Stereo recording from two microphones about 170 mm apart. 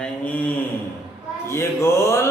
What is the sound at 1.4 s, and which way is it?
Speech, 15° left (ahead or behind).